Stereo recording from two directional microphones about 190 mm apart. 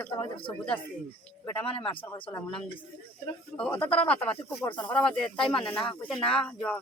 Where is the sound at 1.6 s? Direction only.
30° left (ahead or behind).